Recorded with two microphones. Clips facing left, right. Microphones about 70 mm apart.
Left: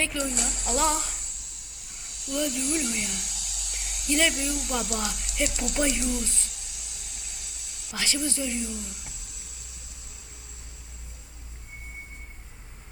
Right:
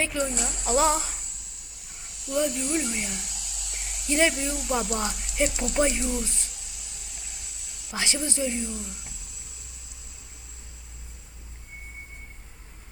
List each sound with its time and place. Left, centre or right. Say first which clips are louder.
0.1 s speech: right 2 dB; centre
6.7 s a sound: left 1 dB; centre
7.9 s speech: right 1 dB; right
8.4 s speech: right 2 dB; centre
9.5 s vehicle: left 1 dB; centre